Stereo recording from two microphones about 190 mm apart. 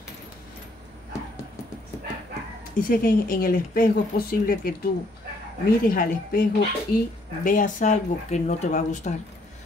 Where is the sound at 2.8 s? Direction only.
50° left (ahead or behind).